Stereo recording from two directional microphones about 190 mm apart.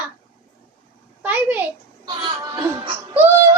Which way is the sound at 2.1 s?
20° right (ahead or behind).